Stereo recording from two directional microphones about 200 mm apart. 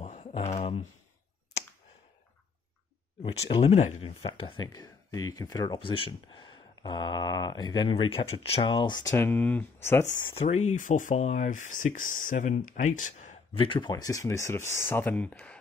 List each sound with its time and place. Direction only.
0.0 s a sound: 35° left (ahead or behind)
3.3 s speech: 25° left (ahead or behind)
10.1 s speech: 30° left (ahead or behind)
13.6 s speech: 25° left (ahead or behind); by 15.5 s 5° left (ahead or behind)